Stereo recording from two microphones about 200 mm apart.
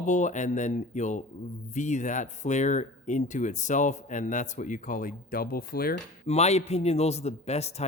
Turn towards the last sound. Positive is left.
turn(degrees=30)  # may be behind; listen again after turning